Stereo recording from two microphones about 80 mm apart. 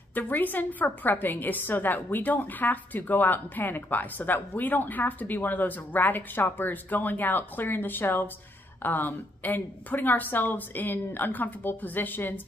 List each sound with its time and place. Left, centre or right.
0.1 s a woman's voice: left